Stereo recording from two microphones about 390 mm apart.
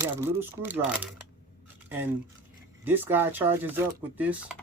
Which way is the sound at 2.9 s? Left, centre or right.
Centre.